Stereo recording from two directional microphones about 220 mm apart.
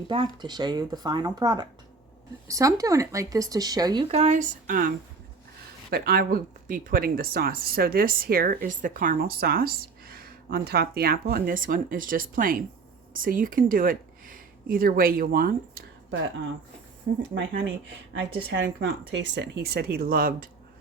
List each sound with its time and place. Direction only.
0.1 s speech: 25° right (ahead or behind)
5.9 s speech: 45° right (ahead or behind)
17.1 s speech: 40° right (ahead or behind)
18.5 s speech: 55° right (ahead or behind); by 20.5 s 40° right (ahead or behind)